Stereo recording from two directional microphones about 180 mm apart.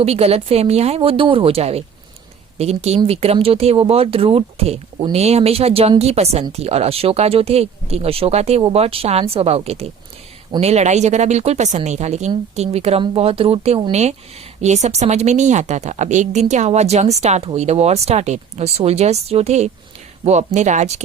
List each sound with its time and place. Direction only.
0.0 s speech: 35° right (ahead or behind)